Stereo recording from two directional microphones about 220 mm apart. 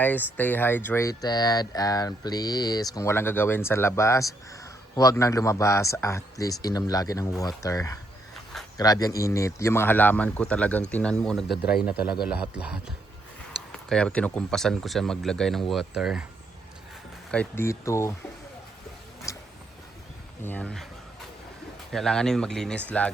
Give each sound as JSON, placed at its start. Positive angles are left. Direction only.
{"t": 0.0, "sound": "speech", "side_deg": 5}
{"t": 11.6, "sound": "speech", "side_deg": 45}
{"t": 12.2, "sound": "speech", "side_deg": -5}
{"t": 17.3, "sound": "speech", "side_deg": 10}
{"t": 19.3, "sound": "a sound", "side_deg": 15}
{"t": 20.4, "sound": "speech", "side_deg": 5}
{"t": 21.9, "sound": "speech", "side_deg": 5}